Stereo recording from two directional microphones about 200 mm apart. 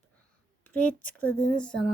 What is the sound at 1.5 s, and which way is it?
Speech, 5° left (ahead or behind).